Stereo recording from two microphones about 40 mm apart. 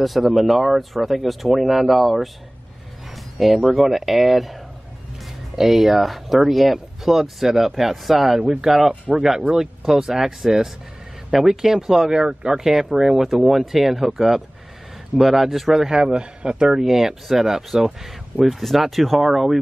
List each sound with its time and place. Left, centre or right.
0.0 s speech: centre
3.3 s speech: centre
5.6 s speech: centre
16.2 s speech: right
16.8 s speech: centre